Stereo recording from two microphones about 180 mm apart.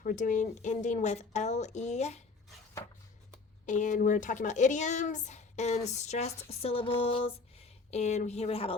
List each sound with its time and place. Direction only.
0.0 s speech: 45° left (ahead or behind)
3.7 s speech: 45° left (ahead or behind)